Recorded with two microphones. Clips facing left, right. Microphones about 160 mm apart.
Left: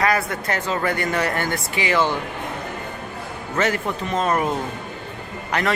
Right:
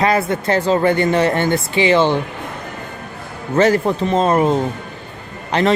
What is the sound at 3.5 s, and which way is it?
A man's voice, 35° right (ahead or behind).